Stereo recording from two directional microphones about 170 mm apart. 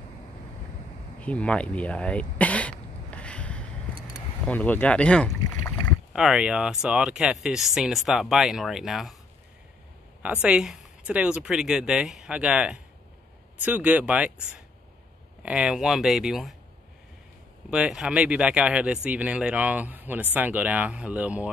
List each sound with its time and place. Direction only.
1.2 s cough: 5° left (ahead or behind)
4.5 s speech: 10° left (ahead or behind)
6.1 s speech: 5° right (ahead or behind)
10.2 s speech: 5° right (ahead or behind)
15.4 s speech: 5° right (ahead or behind)
17.6 s speech: 5° right (ahead or behind)